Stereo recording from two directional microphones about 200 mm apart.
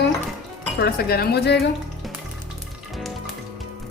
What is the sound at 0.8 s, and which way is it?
Speech, 50° left (ahead or behind).